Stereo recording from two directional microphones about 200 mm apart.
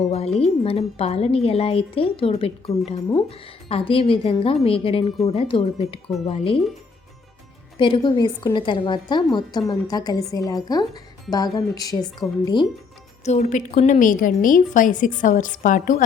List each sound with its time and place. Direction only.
0.1 s a woman's voice: 30° left (ahead or behind)
7.8 s a woman's voice: 25° left (ahead or behind)
13.2 s a woman's voice: 35° left (ahead or behind)